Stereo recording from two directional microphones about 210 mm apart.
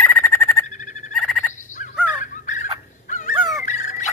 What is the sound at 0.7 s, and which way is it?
Frog, 35° left (ahead or behind).